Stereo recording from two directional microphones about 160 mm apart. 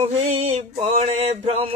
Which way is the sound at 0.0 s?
45° right (ahead or behind).